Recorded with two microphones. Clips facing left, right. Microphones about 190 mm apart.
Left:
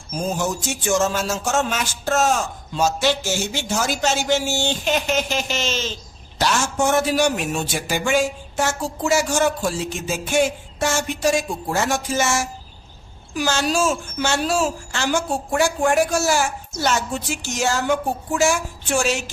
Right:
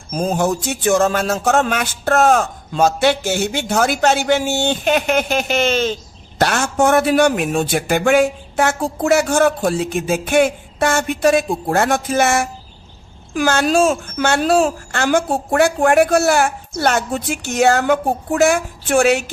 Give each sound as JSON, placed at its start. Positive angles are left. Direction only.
{"t": 0.1, "sound": "a man's voice", "side_deg": -55}